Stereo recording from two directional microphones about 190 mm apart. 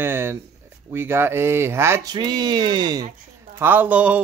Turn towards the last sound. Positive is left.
turn(degrees=-10)  # may be behind; listen again after turning